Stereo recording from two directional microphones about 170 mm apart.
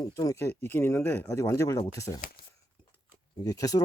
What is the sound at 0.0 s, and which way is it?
Speech, 20° left (ahead or behind).